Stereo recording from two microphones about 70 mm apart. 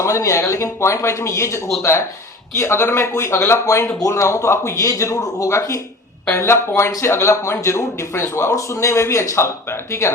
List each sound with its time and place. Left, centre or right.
0.0 s speech: left